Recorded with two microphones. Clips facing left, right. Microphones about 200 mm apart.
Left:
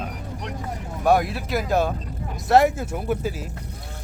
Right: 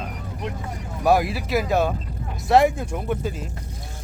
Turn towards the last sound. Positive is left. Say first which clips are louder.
# left 1 dB
turn(degrees=5)  # may be behind; listen again after turning